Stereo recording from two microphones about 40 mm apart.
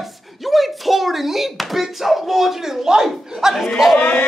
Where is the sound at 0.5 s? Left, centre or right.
Centre.